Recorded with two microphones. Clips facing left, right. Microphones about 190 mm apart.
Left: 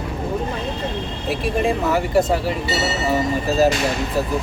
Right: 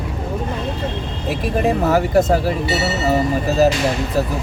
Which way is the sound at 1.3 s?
40° right (ahead or behind).